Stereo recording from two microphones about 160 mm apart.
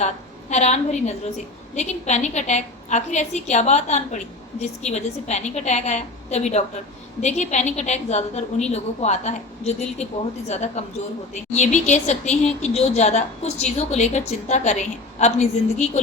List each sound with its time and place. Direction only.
0.5 s a woman's voice: 45° left (ahead or behind)